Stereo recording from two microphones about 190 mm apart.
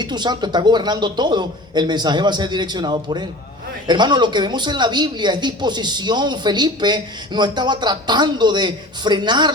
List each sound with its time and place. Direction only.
0.0 s speech: 20° right (ahead or behind)